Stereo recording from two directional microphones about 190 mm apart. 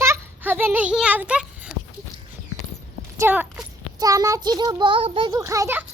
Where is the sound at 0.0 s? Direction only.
10° right (ahead or behind).